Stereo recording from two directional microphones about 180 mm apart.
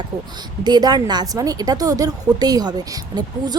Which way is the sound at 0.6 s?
20° right (ahead or behind).